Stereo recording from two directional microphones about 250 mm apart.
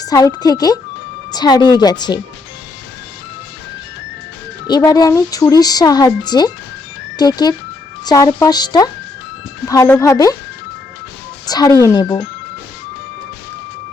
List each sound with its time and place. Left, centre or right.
0.0 s speech: centre
4.6 s speech: centre
11.4 s speech: centre